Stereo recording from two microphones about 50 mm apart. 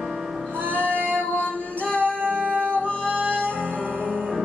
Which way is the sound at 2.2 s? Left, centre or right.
Right.